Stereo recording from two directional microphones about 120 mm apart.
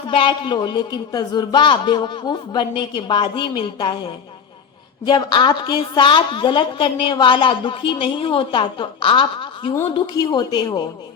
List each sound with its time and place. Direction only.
0.1 s a woman's voice: 45° left (ahead or behind)
10.2 s a woman's voice: 35° left (ahead or behind)